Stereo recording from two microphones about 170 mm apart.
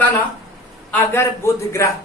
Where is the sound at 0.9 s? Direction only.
10° left (ahead or behind).